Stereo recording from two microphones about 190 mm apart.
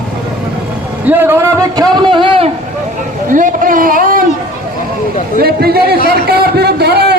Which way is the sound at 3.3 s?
45° right (ahead or behind).